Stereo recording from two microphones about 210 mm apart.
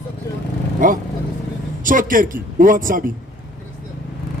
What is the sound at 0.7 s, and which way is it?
A man's voice, 40° right (ahead or behind).